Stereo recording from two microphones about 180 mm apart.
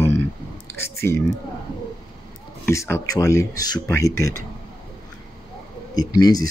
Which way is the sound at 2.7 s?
15° left (ahead or behind).